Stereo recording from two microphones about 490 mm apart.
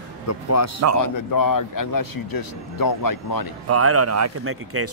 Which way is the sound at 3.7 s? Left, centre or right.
Right.